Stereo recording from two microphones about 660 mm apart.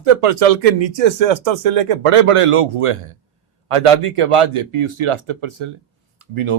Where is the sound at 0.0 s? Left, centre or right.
Right.